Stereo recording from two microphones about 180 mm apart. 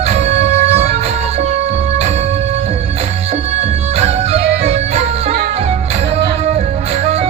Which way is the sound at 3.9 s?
35° right (ahead or behind).